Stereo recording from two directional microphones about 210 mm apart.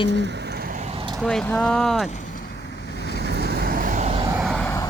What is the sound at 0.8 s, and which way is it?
Vehicle, 30° right (ahead or behind).